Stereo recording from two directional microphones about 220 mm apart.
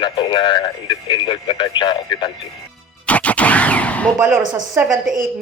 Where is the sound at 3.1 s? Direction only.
5° left (ahead or behind).